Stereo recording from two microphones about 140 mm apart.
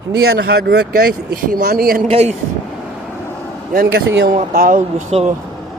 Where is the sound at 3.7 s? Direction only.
90° right.